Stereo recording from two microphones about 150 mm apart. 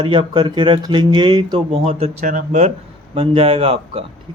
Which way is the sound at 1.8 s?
40° right (ahead or behind).